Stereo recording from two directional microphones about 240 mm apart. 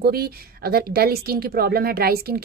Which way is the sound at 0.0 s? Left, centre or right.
Right.